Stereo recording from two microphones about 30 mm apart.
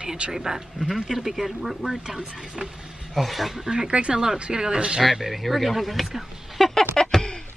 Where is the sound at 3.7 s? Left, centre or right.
Right.